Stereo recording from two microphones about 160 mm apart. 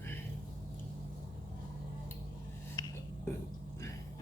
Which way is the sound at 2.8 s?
25° left (ahead or behind).